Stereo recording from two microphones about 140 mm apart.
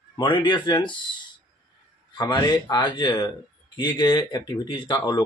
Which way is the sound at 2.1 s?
30° left (ahead or behind).